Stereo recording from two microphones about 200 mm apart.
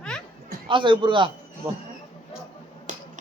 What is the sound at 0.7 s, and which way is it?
Speech, 25° right (ahead or behind).